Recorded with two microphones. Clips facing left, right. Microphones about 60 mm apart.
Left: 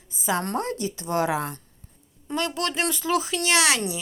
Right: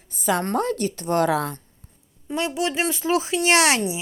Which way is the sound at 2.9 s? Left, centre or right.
Right.